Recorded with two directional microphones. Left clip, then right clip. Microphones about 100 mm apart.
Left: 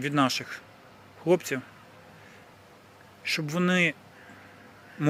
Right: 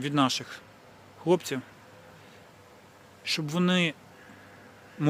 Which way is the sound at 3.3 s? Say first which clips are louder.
Left 1 dB; 20° right (ahead or behind).